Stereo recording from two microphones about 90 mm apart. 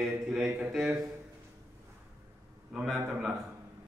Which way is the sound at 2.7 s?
10° right (ahead or behind).